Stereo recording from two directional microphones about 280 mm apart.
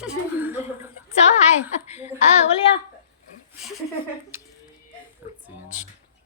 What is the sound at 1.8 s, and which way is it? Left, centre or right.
Speech, left.